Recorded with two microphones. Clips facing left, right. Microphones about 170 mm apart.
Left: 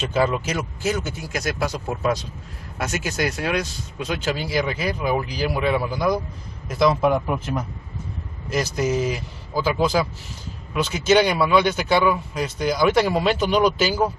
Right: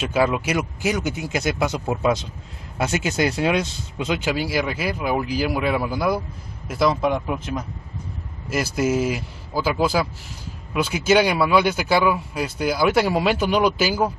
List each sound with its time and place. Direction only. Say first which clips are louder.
0.0 s a man's voice: right 1 dB; 10° right (ahead or behind)
4.2 s a man's voice: left 2 dB; 10° right (ahead or behind)
8.5 s a man's voice: right 1 dB; 5° right (ahead or behind)